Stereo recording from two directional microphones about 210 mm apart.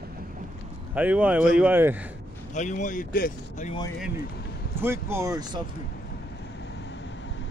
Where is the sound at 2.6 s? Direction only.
35° left (ahead or behind).